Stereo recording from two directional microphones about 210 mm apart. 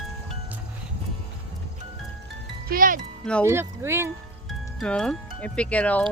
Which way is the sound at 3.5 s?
10° right (ahead or behind).